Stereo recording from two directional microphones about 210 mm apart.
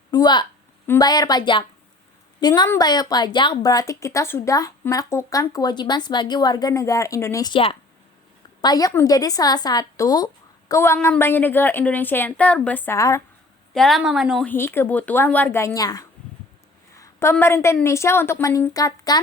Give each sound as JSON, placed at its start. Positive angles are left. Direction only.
{"t": 0.1, "sound": "a woman's voice", "side_deg": 20}
{"t": 13.7, "sound": "a woman's voice", "side_deg": 0}
{"t": 14.5, "sound": "a woman's voice", "side_deg": 10}